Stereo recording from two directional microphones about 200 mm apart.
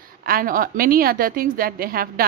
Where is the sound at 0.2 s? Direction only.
45° right (ahead or behind).